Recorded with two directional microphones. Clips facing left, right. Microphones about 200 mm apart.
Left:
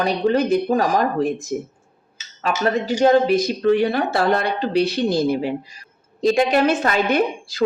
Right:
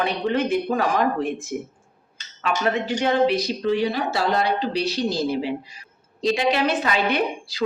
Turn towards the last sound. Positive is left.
turn(degrees=45)  # may be behind; listen again after turning